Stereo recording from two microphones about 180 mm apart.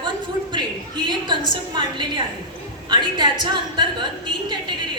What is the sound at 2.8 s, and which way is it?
Speech, 25° right (ahead or behind).